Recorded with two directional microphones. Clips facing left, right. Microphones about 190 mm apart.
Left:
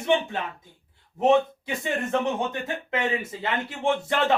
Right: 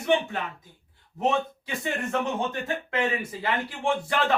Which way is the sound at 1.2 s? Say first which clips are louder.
Left 6 dB; 20° left (ahead or behind).